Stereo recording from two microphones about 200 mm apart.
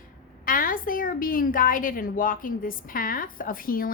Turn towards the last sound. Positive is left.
turn(degrees=45)  # may be behind; listen again after turning